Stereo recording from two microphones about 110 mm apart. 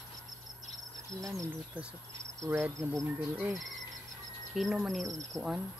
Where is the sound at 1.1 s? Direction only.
30° right (ahead or behind).